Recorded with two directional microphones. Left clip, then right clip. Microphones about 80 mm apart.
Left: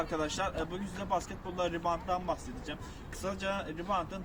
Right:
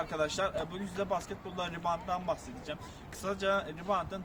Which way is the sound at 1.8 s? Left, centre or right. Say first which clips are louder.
Left 1 dB; right.